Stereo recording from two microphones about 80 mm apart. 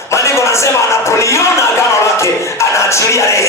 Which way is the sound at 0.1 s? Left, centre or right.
Left.